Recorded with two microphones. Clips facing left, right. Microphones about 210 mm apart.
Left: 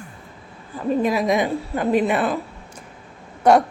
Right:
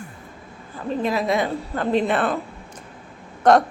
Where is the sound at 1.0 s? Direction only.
15° left (ahead or behind).